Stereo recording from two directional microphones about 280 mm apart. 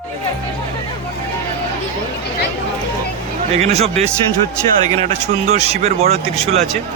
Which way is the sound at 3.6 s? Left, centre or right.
Right.